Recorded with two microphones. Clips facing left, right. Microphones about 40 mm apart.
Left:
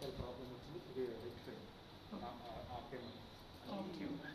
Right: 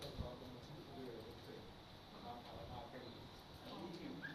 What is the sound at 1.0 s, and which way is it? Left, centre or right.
Speech, left.